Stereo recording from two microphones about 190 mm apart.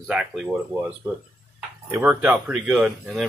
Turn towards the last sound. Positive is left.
turn(degrees=0)  # may be behind; listen again after turning